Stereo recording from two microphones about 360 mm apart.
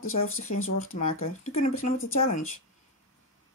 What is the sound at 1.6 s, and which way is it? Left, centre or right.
Speech, left.